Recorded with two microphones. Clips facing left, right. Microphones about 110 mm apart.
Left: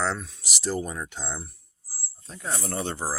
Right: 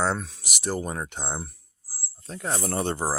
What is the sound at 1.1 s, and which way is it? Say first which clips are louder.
Speech: right 3 dB; 60° right (ahead or behind).